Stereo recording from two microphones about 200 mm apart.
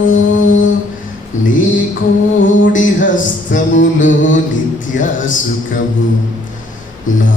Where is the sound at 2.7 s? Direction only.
40° left (ahead or behind).